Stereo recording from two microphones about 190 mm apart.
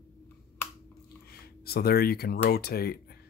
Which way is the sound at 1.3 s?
55° left (ahead or behind).